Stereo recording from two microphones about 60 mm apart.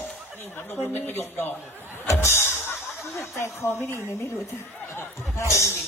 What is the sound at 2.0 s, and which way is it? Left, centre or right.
Music, left.